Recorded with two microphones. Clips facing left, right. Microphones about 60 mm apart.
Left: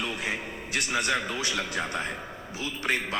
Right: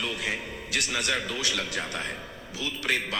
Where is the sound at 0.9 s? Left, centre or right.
Left.